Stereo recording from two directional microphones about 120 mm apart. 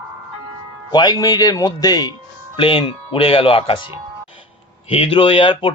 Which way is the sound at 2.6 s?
45° left (ahead or behind).